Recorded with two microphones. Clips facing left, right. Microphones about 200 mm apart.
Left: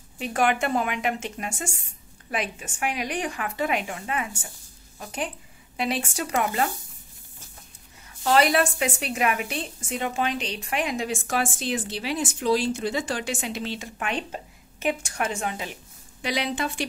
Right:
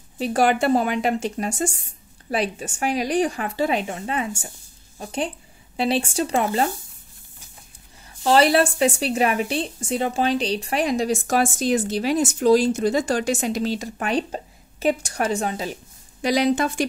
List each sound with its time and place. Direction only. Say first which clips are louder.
0.2 s a woman's voice: right 5 dB; 35° right (ahead or behind)
8.2 s a woman's voice: right 4 dB; 30° right (ahead or behind)